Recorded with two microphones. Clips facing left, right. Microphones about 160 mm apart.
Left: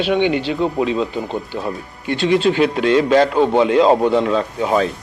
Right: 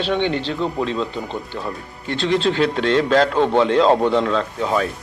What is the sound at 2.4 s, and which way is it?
Speech, 5° left (ahead or behind).